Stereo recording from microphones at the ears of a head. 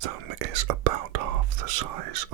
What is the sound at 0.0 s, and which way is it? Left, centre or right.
Whispering, right.